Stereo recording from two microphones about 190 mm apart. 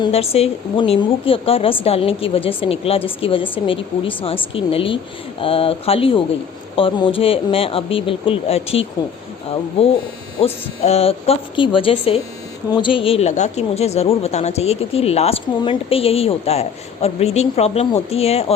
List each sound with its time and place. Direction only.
0.0 s a woman's voice: 30° left (ahead or behind)
10.4 s speech: 30° left (ahead or behind)